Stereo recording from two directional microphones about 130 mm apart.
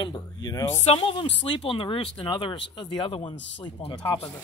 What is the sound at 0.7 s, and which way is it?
Speech, 50° left (ahead or behind).